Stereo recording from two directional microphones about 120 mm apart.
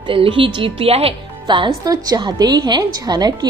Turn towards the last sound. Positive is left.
turn(degrees=-35)  # may be behind; listen again after turning